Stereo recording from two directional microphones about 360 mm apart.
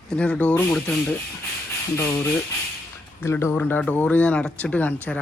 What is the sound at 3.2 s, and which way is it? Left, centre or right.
Speech, centre.